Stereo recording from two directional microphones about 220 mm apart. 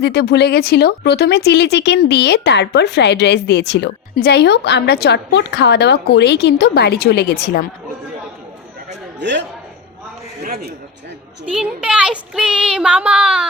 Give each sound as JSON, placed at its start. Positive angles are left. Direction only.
{"t": 0.0, "sound": "speech", "side_deg": 50}
{"t": 10.4, "sound": "a sound", "side_deg": -35}
{"t": 11.5, "sound": "child singing", "side_deg": -5}